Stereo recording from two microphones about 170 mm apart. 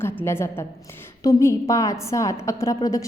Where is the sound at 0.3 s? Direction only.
15° left (ahead or behind).